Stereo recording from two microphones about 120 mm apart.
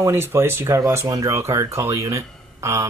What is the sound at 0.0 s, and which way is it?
Speech, 20° right (ahead or behind).